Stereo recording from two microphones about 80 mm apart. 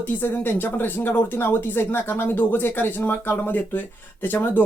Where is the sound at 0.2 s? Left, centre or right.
Left.